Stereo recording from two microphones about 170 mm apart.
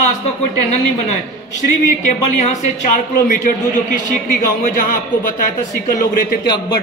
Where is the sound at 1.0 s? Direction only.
45° left (ahead or behind).